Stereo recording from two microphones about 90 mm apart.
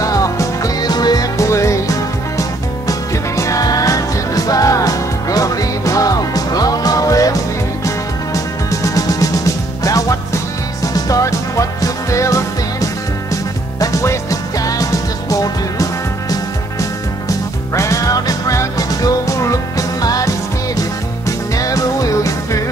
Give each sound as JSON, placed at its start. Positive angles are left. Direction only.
{"t": 0.0, "sound": "music", "side_deg": 40}
{"t": 1.4, "sound": "music", "side_deg": 35}